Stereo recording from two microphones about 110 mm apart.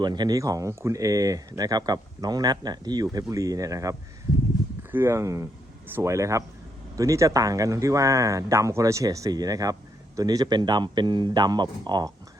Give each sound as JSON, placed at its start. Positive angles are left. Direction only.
{"t": 0.0, "sound": "speech", "side_deg": -40}
{"t": 4.8, "sound": "speech", "side_deg": -20}